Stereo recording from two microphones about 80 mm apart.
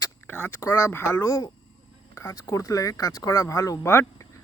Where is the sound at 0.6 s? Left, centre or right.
Left.